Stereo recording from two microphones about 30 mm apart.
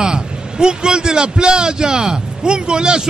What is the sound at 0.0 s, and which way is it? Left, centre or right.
A man's voice, right.